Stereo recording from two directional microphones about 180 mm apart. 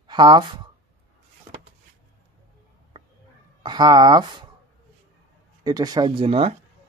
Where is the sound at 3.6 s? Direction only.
25° right (ahead or behind).